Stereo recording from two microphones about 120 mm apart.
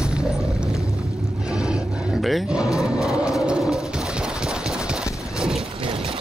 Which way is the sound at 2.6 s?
25° left (ahead or behind).